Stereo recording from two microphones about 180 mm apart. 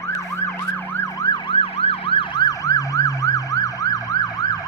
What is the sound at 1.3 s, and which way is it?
Emergency vehicle, 30° left (ahead or behind).